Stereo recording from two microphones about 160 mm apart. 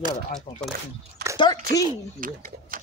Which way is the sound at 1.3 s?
30° left (ahead or behind).